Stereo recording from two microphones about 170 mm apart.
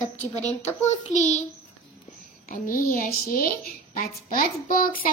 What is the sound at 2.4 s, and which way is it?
A woman's voice, 55° left (ahead or behind).